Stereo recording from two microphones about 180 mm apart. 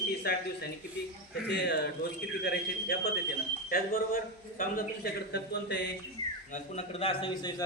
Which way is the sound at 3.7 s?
55° left (ahead or behind).